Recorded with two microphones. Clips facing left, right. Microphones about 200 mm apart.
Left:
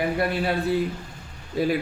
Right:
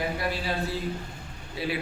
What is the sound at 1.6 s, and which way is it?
Speech, 45° left (ahead or behind).